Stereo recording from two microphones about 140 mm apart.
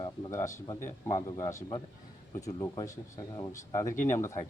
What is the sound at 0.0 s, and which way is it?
A man's voice, 25° left (ahead or behind).